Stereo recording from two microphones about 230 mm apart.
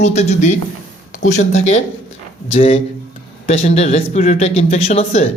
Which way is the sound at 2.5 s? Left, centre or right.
Left.